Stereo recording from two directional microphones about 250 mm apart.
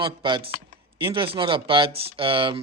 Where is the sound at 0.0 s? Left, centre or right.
Centre.